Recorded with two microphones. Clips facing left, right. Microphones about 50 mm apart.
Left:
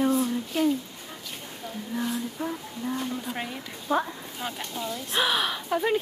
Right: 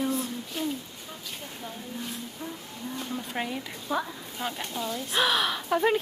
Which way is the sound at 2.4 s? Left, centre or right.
Left.